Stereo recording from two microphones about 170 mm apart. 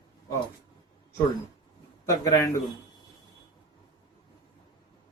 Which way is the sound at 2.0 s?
20° left (ahead or behind).